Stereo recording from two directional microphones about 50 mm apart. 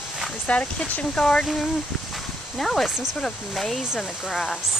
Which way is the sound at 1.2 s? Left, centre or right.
Centre.